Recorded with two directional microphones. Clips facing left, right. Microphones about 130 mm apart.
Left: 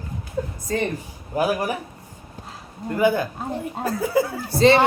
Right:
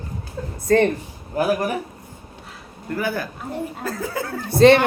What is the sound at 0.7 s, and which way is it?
Speech, 70° right (ahead or behind).